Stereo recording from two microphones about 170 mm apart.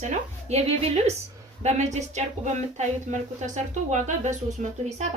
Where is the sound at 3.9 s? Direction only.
45° right (ahead or behind).